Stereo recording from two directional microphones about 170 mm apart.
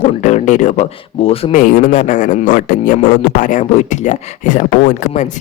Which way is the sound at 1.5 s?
55° left (ahead or behind).